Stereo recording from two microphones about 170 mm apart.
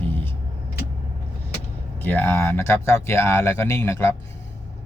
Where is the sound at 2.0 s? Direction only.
10° left (ahead or behind).